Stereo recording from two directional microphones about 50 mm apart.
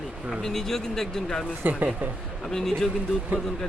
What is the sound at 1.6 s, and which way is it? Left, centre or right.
Speech, right.